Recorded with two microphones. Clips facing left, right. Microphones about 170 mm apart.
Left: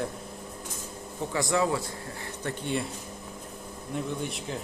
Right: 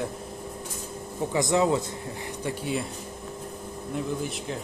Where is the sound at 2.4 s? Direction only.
5° right (ahead or behind).